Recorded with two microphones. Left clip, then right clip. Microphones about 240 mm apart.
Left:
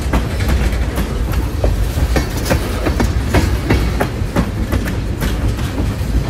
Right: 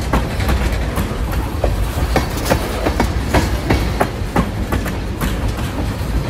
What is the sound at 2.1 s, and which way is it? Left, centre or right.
Train, right.